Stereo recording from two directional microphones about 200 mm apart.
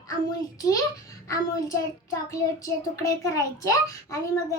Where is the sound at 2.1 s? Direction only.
15° left (ahead or behind).